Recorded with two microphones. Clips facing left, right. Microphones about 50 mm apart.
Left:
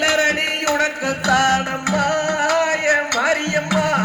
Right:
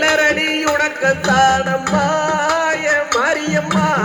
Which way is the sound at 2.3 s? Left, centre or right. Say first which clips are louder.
Right 2 dB; left.